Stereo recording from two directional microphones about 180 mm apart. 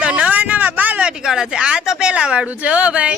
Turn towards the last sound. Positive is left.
turn(degrees=-5)  # may be behind; listen again after turning